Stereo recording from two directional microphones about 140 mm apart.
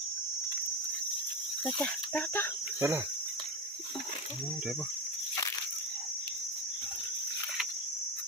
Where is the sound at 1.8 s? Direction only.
15° left (ahead or behind).